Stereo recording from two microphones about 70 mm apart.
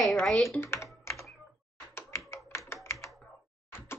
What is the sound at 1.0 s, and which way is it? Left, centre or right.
Computer keyboard, left.